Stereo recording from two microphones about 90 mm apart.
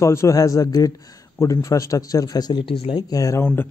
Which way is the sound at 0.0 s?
30° left (ahead or behind).